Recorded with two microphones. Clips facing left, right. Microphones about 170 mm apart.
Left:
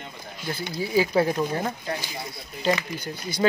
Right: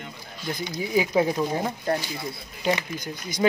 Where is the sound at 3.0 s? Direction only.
10° left (ahead or behind).